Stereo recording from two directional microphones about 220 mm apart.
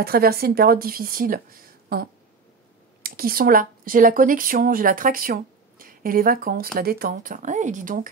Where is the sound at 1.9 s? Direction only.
45° right (ahead or behind).